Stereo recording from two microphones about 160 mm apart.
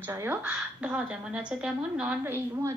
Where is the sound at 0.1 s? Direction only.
10° right (ahead or behind).